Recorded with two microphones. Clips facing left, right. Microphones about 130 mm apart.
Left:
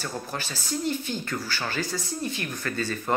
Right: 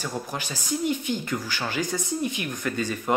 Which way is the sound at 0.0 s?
15° right (ahead or behind).